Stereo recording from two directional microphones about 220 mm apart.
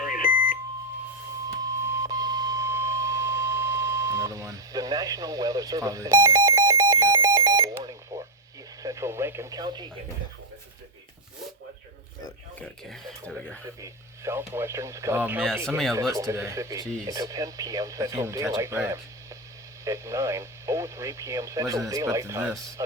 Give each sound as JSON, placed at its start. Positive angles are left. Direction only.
{"t": 0.0, "sound": "beep", "side_deg": 35}
{"t": 1.7, "sound": "beep", "side_deg": -15}
{"t": 8.8, "sound": "speech", "side_deg": -15}
{"t": 12.5, "sound": "speech", "side_deg": 5}
{"t": 13.8, "sound": "speech", "side_deg": -10}